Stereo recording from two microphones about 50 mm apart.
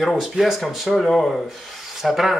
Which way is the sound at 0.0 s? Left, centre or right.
Centre.